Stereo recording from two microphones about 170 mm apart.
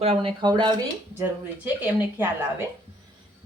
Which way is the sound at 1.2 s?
10° right (ahead or behind).